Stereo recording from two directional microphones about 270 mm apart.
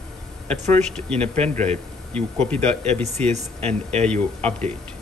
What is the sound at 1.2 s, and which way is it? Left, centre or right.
Speech, right.